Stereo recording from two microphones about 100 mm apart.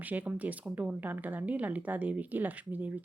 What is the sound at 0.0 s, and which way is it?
Speech, 15° right (ahead or behind).